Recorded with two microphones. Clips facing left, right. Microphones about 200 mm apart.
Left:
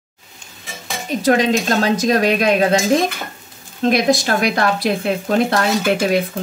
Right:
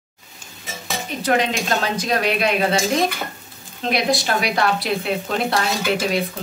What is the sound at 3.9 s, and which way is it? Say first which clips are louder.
Speech: left 5 dB; 45° left (ahead or behind).